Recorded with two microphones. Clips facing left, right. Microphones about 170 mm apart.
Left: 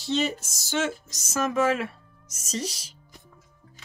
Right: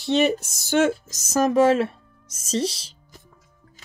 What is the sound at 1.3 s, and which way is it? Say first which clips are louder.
Speech: right 7 dB; 35° right (ahead or behind).